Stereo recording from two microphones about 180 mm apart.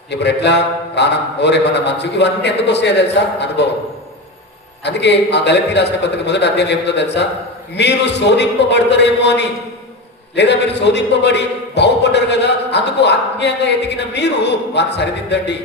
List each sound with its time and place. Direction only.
0.1 s a man's voice: 70° left (ahead or behind)
4.8 s a man's voice: 70° left (ahead or behind)